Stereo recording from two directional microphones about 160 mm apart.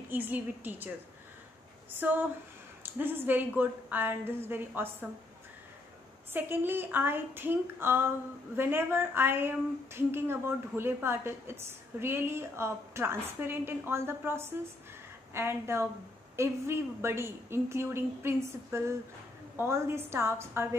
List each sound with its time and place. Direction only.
0.1 s speech: 10° right (ahead or behind)
6.3 s speech: 10° right (ahead or behind)